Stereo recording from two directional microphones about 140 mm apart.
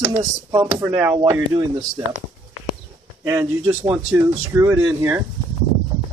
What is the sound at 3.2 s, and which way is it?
Speech, 20° right (ahead or behind).